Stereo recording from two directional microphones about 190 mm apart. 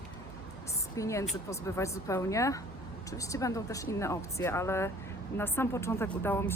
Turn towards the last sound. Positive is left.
turn(degrees=10)  # may be behind; listen again after turning